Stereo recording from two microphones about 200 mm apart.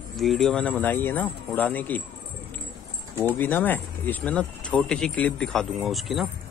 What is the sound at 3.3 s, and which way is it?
Speech, 10° left (ahead or behind).